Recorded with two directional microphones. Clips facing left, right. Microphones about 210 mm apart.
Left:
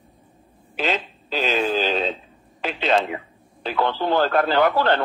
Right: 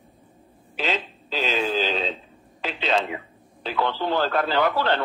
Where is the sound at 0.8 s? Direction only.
50° left (ahead or behind).